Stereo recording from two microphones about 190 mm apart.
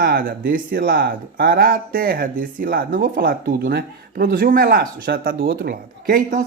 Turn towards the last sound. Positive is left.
turn(degrees=-50)  # may be behind; listen again after turning